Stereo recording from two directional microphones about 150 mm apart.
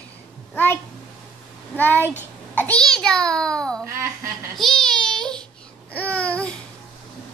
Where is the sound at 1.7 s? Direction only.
15° left (ahead or behind).